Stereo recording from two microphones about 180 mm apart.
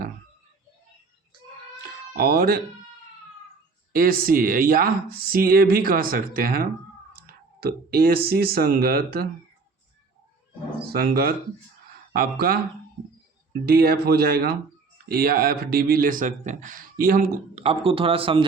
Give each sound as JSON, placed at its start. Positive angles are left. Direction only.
{"t": 2.1, "sound": "speech", "side_deg": -60}
{"t": 3.9, "sound": "speech", "side_deg": -55}
{"t": 10.9, "sound": "speech", "side_deg": -55}
{"t": 17.5, "sound": "a man's voice", "side_deg": -35}